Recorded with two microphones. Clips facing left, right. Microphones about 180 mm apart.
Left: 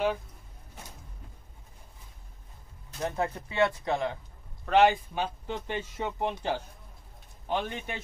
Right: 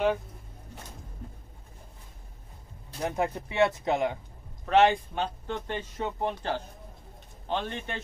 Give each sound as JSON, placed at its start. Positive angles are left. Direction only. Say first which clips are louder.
{"t": 3.0, "sound": "speech", "louder": "right 2 dB", "side_deg": -15}
{"t": 4.6, "sound": "a man's voice", "louder": "even", "side_deg": 0}